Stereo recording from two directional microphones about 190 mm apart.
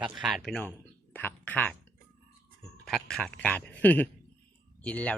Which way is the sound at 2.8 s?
Centre (ahead or behind).